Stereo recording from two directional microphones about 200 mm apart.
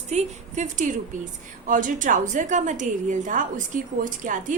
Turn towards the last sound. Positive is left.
turn(degrees=-40)  # may be behind; listen again after turning